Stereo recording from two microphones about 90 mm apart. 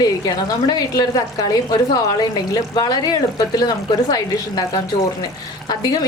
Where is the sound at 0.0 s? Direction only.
45° left (ahead or behind).